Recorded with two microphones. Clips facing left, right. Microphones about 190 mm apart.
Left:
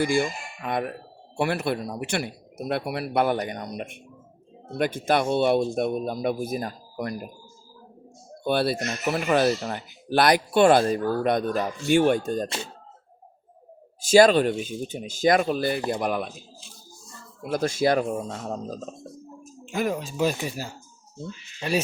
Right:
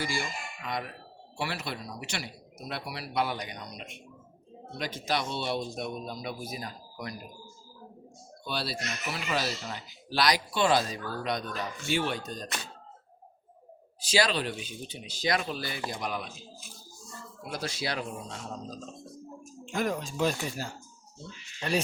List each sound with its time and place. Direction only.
0.0 s speech: 55° left (ahead or behind)
8.4 s speech: 55° left (ahead or behind)
14.0 s speech: 50° left (ahead or behind)
17.5 s speech: 50° left (ahead or behind)
19.6 s speech: 5° left (ahead or behind)